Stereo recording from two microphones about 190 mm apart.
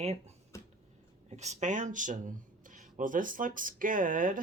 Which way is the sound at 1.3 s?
35° right (ahead or behind).